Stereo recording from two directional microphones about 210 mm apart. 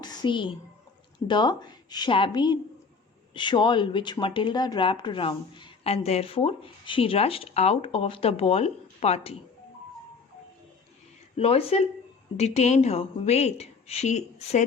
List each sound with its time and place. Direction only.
0.0 s a sound: 20° left (ahead or behind)
1.3 s speech: 20° left (ahead or behind)
11.3 s a woman's voice: 30° left (ahead or behind)